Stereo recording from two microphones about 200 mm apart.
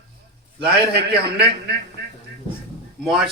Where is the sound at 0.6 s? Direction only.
55° right (ahead or behind).